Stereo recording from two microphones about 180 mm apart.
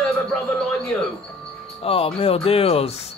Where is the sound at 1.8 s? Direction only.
30° left (ahead or behind).